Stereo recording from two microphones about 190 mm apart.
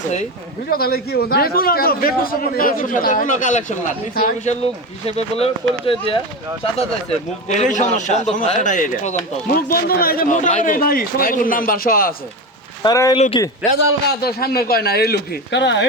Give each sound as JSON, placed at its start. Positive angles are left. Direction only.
{"t": 0.7, "sound": "speech", "side_deg": 55}
{"t": 7.4, "sound": "speech", "side_deg": 40}
{"t": 12.8, "sound": "speech", "side_deg": 20}
{"t": 13.1, "sound": "a man's voice", "side_deg": 35}
{"t": 14.2, "sound": "speech", "side_deg": 55}